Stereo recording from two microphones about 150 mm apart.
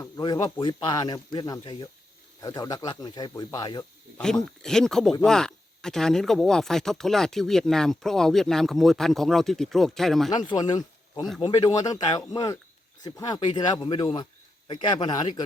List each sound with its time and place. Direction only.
0.0 s speech: 25° left (ahead or behind)
4.2 s speech: 5° left (ahead or behind)
10.3 s speech: 30° left (ahead or behind)